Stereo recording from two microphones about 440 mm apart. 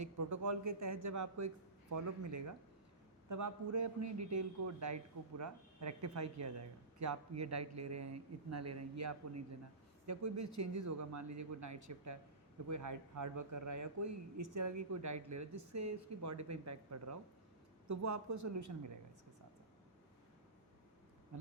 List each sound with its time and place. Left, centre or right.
0.0 s a man's voice: right
3.2 s a man's voice: right